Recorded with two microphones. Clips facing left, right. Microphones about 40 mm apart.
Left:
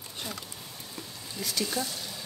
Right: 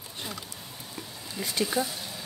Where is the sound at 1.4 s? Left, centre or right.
Right.